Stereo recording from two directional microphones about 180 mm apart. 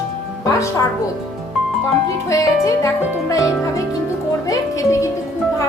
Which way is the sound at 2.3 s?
15° left (ahead or behind).